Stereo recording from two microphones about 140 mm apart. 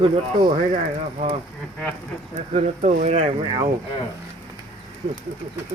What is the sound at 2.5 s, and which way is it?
Speech, 55° right (ahead or behind).